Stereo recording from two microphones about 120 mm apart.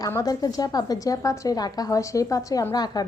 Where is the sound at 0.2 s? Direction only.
30° left (ahead or behind).